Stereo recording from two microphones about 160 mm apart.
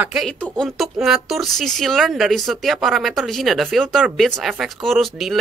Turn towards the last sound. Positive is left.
turn(degrees=0)  # may be behind; listen again after turning